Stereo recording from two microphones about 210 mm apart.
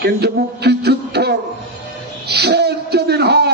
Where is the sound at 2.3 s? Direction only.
50° right (ahead or behind).